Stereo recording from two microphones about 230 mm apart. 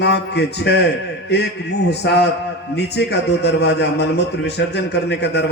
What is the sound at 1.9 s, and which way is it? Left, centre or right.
A man's voice, left.